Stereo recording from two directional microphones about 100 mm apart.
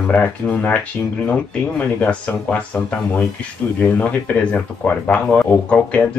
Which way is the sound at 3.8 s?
15° left (ahead or behind).